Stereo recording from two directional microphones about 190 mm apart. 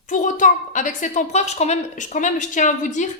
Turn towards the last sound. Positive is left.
turn(degrees=40)  # may be behind; listen again after turning